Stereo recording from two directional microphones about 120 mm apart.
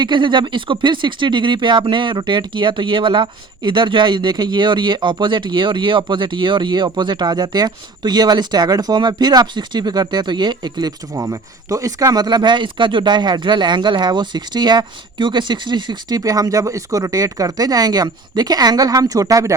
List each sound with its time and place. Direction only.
0.0 s speech: 40° right (ahead or behind)